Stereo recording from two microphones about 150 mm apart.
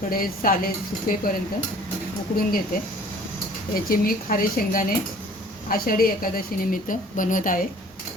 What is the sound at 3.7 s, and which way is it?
A woman's voice, 75° left (ahead or behind).